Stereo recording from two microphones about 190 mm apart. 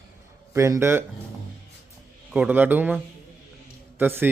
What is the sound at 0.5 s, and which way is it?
Speech, 15° right (ahead or behind).